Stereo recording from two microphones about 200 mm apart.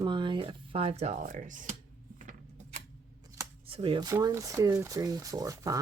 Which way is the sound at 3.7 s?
25° right (ahead or behind).